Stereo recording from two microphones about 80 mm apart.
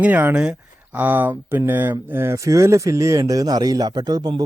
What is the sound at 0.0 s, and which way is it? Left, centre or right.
A man's voice, right.